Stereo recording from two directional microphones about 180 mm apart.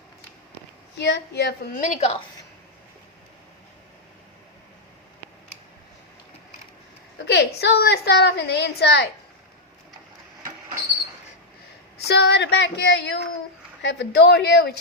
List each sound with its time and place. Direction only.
0.9 s a woman's voice: 70° left (ahead or behind)
1.7 s a woman's voice: 40° left (ahead or behind)
7.3 s a woman's voice: 70° left (ahead or behind)
11.9 s a woman's voice: 65° left (ahead or behind)